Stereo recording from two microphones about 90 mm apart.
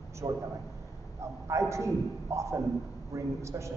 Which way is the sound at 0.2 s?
45° right (ahead or behind).